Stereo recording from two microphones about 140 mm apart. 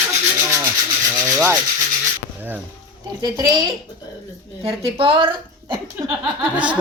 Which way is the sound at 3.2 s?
30° right (ahead or behind).